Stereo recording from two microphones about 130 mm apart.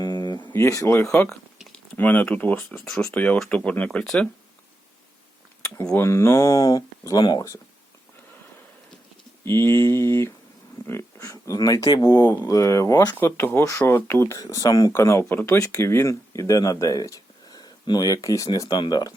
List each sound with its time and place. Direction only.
0.0 s a sound: 30° left (ahead or behind)
0.5 s speech: 20° left (ahead or behind)
1.3 s a sound: centre (ahead or behind)
2.0 s speech: 10° left (ahead or behind)
6.0 s speech: 20° left (ahead or behind)
9.4 s speech: 20° left (ahead or behind)
13.1 s speech: 15° left (ahead or behind); by 19.1 s 30° left (ahead or behind)